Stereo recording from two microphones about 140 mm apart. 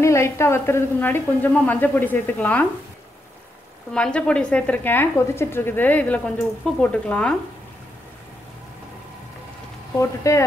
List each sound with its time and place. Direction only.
0.0 s a woman's voice: 20° left (ahead or behind)
3.9 s a woman's voice: 5° left (ahead or behind)
9.9 s speech: 20° left (ahead or behind)